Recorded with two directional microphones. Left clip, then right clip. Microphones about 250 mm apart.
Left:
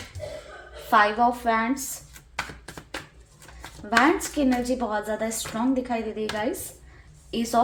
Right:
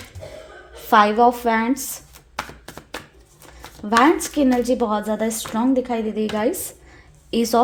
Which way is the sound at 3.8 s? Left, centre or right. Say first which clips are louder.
Right 5 dB; right.